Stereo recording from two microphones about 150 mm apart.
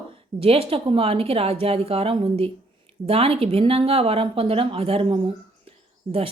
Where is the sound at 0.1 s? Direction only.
40° right (ahead or behind).